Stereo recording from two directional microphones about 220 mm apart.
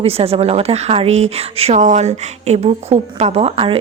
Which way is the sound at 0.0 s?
25° right (ahead or behind).